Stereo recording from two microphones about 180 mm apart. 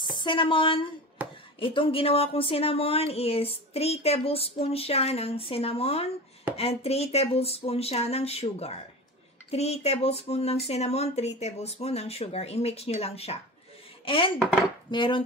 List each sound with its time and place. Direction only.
0.0 s speech: 25° left (ahead or behind)
1.2 s a sound: 10° right (ahead or behind)
1.6 s speech: 30° left (ahead or behind)
14.0 s dishes: 30° left (ahead or behind)
14.9 s speech: 25° left (ahead or behind)